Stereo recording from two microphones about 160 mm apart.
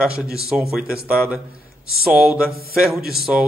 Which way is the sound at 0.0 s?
5° right (ahead or behind).